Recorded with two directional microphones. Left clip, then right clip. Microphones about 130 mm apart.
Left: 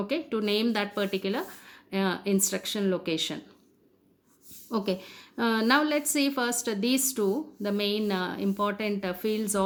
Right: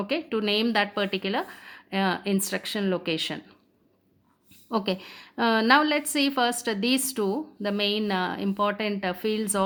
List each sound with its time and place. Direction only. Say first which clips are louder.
0.1 s a woman's voice: right 3 dB; 25° right (ahead or behind)
4.7 s a woman's voice: right 2 dB; 25° right (ahead or behind)